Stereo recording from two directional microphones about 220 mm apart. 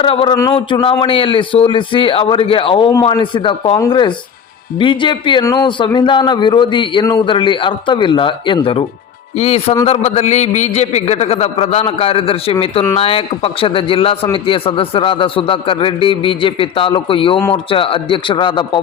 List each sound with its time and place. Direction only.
0.0 s a man's voice: 25° left (ahead or behind)